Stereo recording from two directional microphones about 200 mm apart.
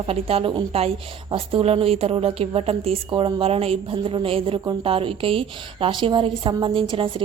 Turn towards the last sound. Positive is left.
turn(degrees=-25)  # may be behind; listen again after turning